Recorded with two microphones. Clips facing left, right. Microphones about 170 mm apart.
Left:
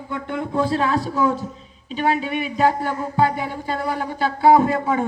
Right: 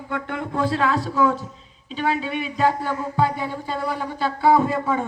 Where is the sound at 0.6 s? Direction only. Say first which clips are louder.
Even; 90° right.